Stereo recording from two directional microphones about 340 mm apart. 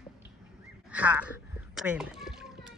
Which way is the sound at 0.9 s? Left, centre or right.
Centre.